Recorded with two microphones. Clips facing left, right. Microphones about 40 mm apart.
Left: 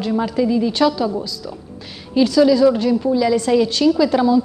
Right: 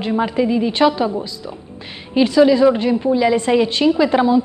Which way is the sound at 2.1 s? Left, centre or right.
Right.